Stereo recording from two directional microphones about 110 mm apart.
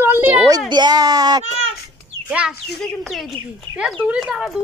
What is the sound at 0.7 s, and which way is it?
Speech, 40° right (ahead or behind).